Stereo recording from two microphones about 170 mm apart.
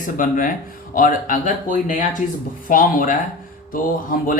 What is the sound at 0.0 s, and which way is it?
Speech, 50° left (ahead or behind).